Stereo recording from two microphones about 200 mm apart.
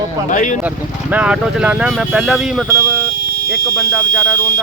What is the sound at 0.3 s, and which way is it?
Speech, 40° left (ahead or behind).